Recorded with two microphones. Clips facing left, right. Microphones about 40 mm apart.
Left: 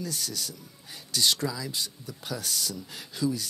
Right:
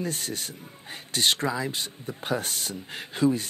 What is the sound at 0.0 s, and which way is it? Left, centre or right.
Speech, right.